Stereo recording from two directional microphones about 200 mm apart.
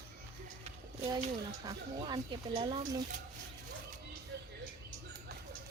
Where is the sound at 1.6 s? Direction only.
20° right (ahead or behind).